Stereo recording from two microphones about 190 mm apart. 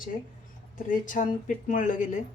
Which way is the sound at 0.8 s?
45° left (ahead or behind).